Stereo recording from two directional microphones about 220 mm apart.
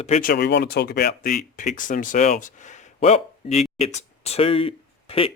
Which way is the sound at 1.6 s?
35° left (ahead or behind).